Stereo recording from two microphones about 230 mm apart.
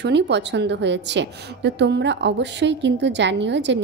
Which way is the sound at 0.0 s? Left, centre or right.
Right.